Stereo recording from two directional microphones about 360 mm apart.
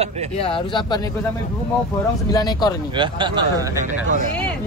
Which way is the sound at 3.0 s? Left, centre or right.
Centre.